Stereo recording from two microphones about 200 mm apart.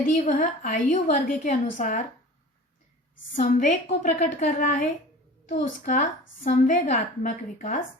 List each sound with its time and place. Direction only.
0.0 s a woman's voice: 40° left (ahead or behind)
3.3 s a woman's voice: 40° left (ahead or behind)